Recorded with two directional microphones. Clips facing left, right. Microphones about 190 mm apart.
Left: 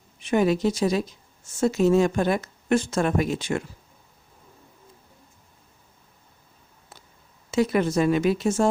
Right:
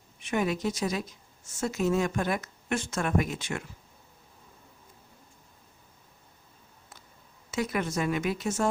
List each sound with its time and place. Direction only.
0.2 s speech: 30° left (ahead or behind)
7.5 s speech: 30° left (ahead or behind)